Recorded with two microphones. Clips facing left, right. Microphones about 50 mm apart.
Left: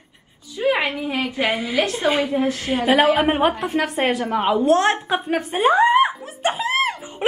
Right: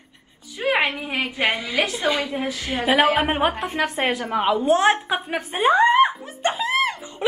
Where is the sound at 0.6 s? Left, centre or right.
Right.